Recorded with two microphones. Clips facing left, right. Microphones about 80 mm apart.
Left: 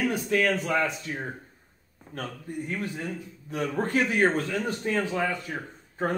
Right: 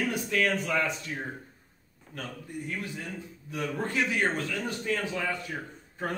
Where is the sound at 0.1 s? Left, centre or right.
Left.